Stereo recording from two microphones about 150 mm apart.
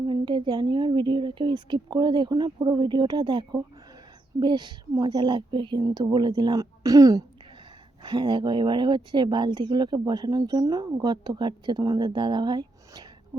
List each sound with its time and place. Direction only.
0.1 s speech: 30° right (ahead or behind)